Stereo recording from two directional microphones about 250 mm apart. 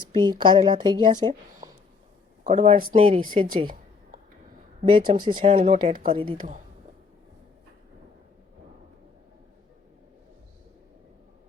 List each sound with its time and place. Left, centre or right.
0.0 s speech: centre
2.4 s speech: right
4.8 s speech: right
6.1 s speech: centre